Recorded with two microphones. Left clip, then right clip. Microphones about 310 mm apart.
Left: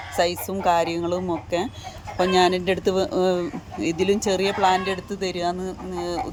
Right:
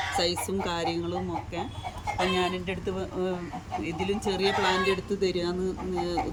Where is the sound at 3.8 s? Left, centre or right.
Centre.